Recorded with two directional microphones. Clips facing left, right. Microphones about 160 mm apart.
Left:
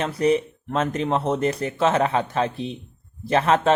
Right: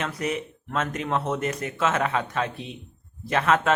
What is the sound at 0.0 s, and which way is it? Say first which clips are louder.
Speech: left 8 dB; 35° left (ahead or behind).